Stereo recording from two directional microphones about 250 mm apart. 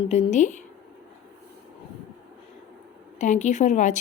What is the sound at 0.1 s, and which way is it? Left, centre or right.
Speech, left.